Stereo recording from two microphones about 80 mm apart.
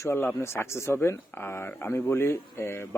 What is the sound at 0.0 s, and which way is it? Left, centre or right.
Speech, left.